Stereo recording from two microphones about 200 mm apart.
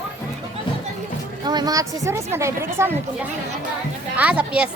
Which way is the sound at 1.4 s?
20° right (ahead or behind).